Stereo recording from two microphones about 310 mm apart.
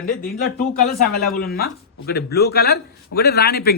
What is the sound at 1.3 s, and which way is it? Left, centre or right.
Speech, left.